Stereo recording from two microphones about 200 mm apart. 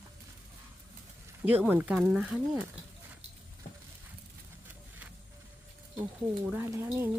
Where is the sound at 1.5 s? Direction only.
10° right (ahead or behind).